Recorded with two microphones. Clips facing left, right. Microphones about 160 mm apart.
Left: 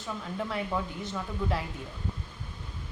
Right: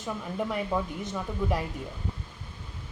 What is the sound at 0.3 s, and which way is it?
Speech, 15° right (ahead or behind).